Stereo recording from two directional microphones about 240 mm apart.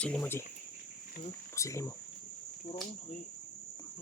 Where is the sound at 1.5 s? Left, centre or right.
Centre.